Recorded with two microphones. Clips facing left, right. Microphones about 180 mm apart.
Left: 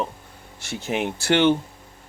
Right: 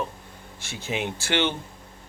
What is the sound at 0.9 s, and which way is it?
Speech, 55° left (ahead or behind).